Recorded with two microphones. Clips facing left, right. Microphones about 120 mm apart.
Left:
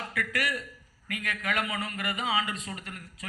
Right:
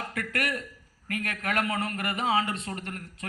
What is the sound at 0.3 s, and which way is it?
A man's voice, 50° right (ahead or behind).